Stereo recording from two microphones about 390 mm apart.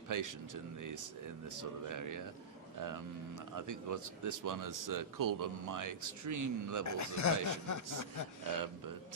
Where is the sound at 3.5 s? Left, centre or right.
Right.